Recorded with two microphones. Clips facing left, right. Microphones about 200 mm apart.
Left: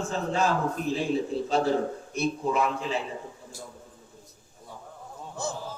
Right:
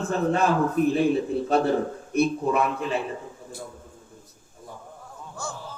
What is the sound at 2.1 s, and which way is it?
Speech, 60° right (ahead or behind).